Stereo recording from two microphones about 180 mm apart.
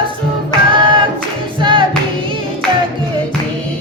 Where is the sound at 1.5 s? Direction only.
30° right (ahead or behind).